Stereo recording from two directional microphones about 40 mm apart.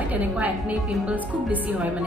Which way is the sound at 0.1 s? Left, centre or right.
Right.